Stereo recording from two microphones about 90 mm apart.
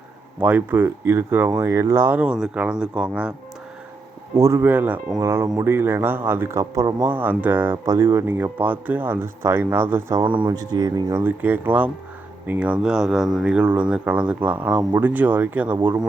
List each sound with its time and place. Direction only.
0.3 s speech: 20° right (ahead or behind)
2.2 s speech: 10° right (ahead or behind)
4.4 s speech: 35° right (ahead or behind)
4.7 s speech: 20° right (ahead or behind)
6.6 s speech: 40° right (ahead or behind)
7.0 s speech: 20° right (ahead or behind)
7.9 s speech: 35° right (ahead or behind)
8.3 s speech: 20° right (ahead or behind)
10.2 s speech: 70° right (ahead or behind)
10.5 s speech: 45° right (ahead or behind)
11.2 s speech: 20° right (ahead or behind)